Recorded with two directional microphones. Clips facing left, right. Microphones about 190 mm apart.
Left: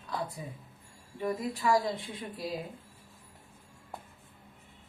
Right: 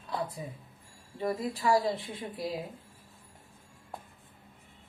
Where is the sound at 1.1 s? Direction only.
35° right (ahead or behind).